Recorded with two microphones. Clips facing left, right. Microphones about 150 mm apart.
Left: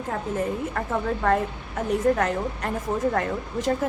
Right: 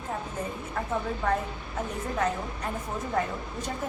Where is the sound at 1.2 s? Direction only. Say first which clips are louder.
Left 5 dB; 85° left.